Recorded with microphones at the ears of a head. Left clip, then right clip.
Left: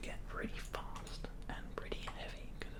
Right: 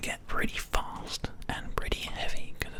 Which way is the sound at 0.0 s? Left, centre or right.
Right.